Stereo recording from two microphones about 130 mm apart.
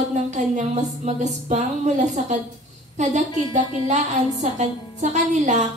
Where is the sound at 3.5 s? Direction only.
65° right (ahead or behind).